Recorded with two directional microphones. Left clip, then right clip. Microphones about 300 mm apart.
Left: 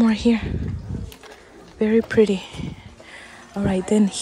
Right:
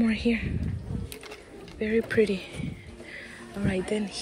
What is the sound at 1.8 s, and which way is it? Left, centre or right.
Speech, centre.